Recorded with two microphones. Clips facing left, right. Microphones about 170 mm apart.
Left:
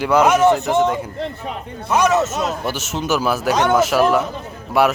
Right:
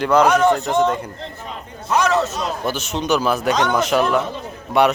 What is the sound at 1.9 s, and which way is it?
Speech, 20° left (ahead or behind).